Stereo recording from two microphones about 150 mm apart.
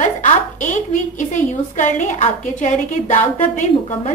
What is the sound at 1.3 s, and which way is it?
A woman's voice, 55° left (ahead or behind).